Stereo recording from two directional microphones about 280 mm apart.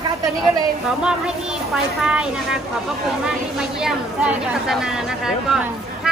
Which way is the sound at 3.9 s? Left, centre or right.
Centre.